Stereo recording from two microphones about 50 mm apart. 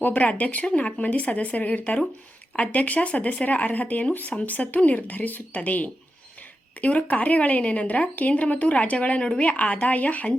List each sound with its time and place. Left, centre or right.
0.0 s speech: left